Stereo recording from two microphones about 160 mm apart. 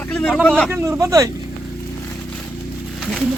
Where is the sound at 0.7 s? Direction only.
15° right (ahead or behind).